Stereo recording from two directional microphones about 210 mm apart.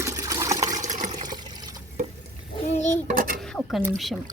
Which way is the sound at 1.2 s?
20° right (ahead or behind).